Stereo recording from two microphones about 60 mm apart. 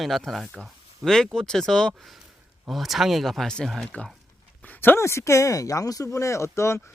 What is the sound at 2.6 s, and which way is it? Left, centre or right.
Speech, centre.